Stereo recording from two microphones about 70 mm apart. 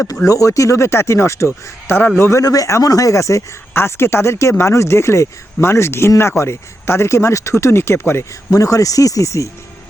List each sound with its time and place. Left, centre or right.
0.3 s speech: left
2.4 s speech: left
8.4 s speech: left